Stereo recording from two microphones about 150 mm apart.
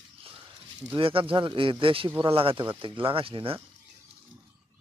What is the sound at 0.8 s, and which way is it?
Speech, 35° right (ahead or behind).